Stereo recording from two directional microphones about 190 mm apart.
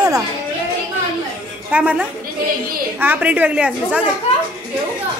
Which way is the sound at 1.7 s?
5° right (ahead or behind).